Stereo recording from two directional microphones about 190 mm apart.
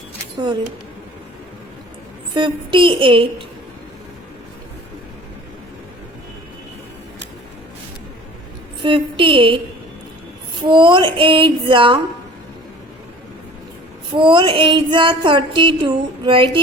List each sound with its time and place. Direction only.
2.3 s female singing: 25° right (ahead or behind)
8.8 s female singing: 25° right (ahead or behind)
10.6 s female singing: 25° right (ahead or behind)
14.1 s female singing: 25° right (ahead or behind)